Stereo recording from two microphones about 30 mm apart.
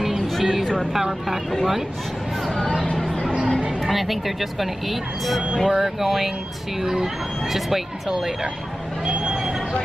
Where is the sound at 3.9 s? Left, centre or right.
Centre.